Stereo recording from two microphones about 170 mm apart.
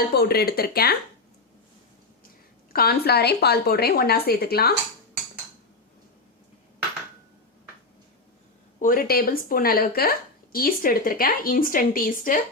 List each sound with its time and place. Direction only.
0.1 s speech: 70° left (ahead or behind)
2.7 s speech: 65° left (ahead or behind)
8.8 s speech: 55° left (ahead or behind)